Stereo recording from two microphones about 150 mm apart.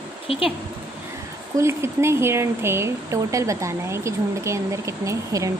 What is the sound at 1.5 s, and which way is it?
Speech, 20° right (ahead or behind).